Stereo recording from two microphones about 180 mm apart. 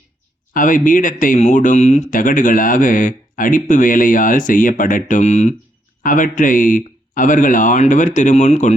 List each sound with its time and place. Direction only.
0.5 s speech: 45° left (ahead or behind)